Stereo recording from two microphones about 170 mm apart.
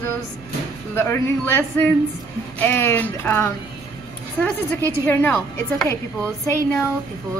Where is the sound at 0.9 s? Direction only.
15° left (ahead or behind).